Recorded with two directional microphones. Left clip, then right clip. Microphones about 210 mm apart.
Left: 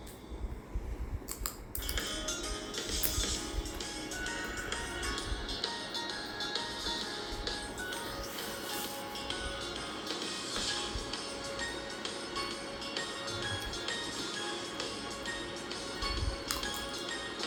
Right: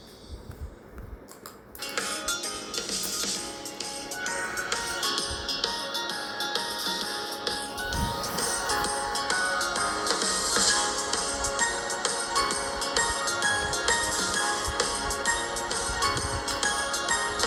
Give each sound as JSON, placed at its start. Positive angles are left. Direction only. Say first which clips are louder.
{"t": 4.3, "sound": "music", "louder": "right 10 dB", "side_deg": -30}
{"t": 5.0, "sound": "music", "louder": "right 9 dB", "side_deg": -45}
{"t": 7.9, "sound": "music", "louder": "right 9 dB", "side_deg": -40}